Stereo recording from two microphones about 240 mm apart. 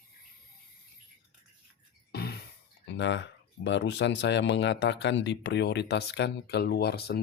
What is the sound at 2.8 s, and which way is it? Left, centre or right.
Speech, left.